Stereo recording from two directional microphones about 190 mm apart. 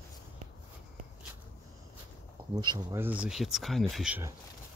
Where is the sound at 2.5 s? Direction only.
20° right (ahead or behind).